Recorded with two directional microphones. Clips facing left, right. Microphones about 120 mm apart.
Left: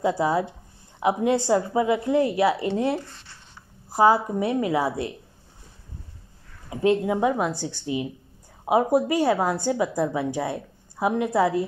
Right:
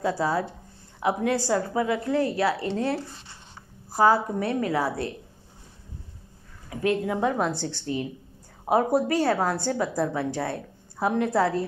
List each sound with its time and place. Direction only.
0.0 s a woman's voice: 20° left (ahead or behind)
6.7 s speech: 25° left (ahead or behind)
7.2 s a woman's voice: 10° left (ahead or behind)